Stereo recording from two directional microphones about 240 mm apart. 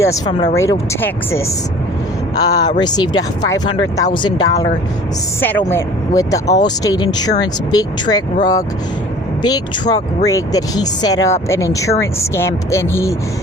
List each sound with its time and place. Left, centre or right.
0.0 s speech: centre